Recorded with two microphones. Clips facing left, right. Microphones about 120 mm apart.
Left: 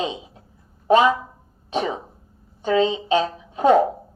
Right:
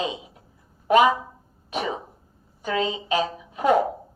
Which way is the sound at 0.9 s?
30° left (ahead or behind).